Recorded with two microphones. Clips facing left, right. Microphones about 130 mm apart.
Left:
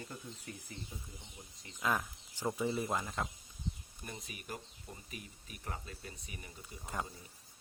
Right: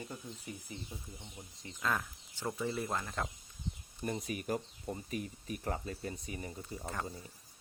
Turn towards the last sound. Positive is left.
turn(degrees=-35)  # may be behind; listen again after turning